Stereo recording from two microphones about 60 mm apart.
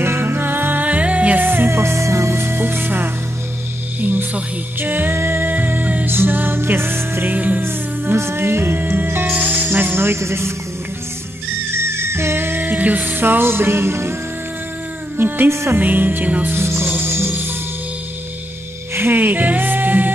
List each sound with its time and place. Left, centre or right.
0.0 s music: right
7.6 s music: right
11.7 s music: right
15.1 s music: right
15.5 s speech: right
15.8 s music: right
16.5 s music: right
18.9 s music: right